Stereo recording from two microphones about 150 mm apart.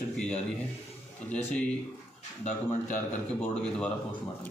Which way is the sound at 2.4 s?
55° left (ahead or behind).